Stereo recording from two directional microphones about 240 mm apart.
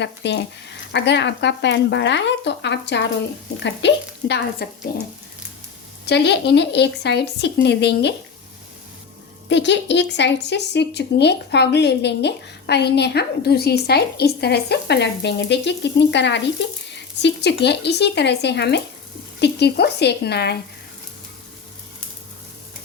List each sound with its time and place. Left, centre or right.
0.0 s speech: left
6.1 s speech: left
9.5 s speech: left